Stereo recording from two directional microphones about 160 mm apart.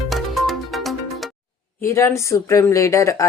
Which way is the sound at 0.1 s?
Centre (ahead or behind).